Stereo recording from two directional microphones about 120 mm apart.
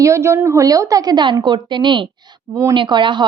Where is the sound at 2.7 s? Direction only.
40° right (ahead or behind).